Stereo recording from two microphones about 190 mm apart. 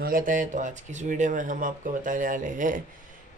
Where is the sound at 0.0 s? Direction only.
45° right (ahead or behind).